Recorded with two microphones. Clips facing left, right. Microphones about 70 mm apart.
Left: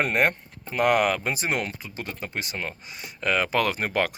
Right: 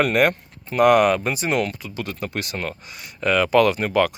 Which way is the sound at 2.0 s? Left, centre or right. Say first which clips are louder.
Right 4 dB; right.